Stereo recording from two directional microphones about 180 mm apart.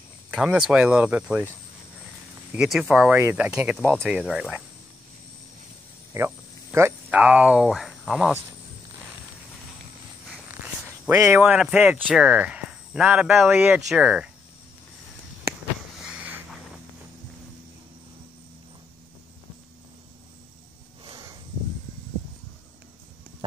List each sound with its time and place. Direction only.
0.3 s speech: 5° right (ahead or behind)
2.5 s speech: 5° right (ahead or behind)
6.1 s speech: 15° right (ahead or behind)
11.1 s speech: 15° right (ahead or behind)
16.0 s a sound: 5° right (ahead or behind)